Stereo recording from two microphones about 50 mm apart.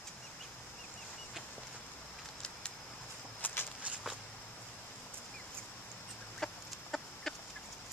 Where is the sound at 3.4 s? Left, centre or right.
Left.